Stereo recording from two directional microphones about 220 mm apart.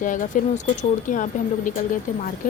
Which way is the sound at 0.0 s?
35° left (ahead or behind).